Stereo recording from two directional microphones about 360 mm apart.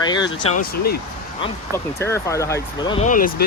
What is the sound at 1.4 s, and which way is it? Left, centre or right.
Speech, centre.